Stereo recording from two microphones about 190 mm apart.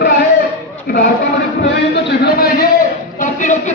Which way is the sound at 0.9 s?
55° left (ahead or behind).